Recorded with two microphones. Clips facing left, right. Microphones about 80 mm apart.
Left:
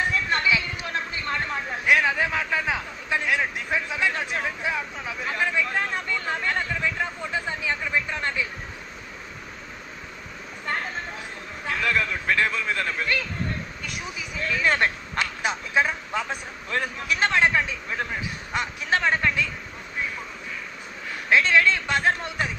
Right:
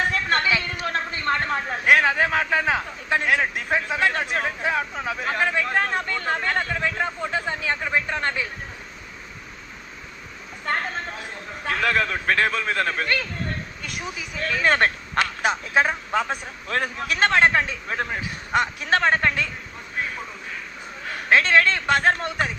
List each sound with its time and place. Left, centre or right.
0.3 s a sound: right
4.4 s speech: right
11.6 s a man's voice: right
14.3 s a man's voice: right
21.2 s a man's voice: right